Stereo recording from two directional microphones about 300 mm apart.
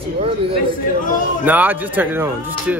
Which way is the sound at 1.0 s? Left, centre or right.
Left.